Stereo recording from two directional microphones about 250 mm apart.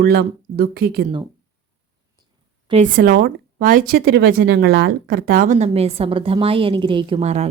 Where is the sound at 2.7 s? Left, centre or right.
Right.